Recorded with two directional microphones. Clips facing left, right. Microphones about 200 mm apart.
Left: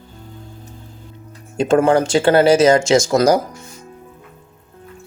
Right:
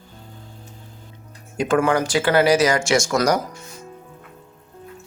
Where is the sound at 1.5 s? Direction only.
25° left (ahead or behind).